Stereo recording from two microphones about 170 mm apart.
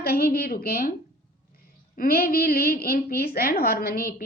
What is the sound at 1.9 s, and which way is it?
A woman's voice, 60° left (ahead or behind).